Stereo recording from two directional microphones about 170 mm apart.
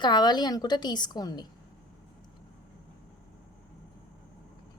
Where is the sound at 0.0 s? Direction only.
25° left (ahead or behind).